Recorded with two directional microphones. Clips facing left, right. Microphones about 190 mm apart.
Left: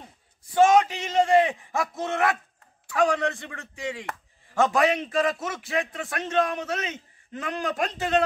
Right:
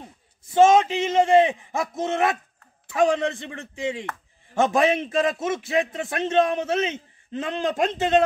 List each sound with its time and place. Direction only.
0.6 s a man's voice: 25° right (ahead or behind)